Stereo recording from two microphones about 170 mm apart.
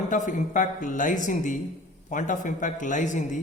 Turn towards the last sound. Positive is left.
turn(degrees=45)  # may be behind; listen again after turning